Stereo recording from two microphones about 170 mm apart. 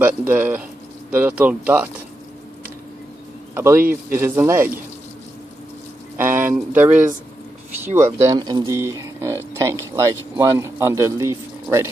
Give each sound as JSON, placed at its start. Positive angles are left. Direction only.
{"t": 0.3, "sound": "speech", "side_deg": -10}
{"t": 3.5, "sound": "speech", "side_deg": -15}
{"t": 6.1, "sound": "speech", "side_deg": -15}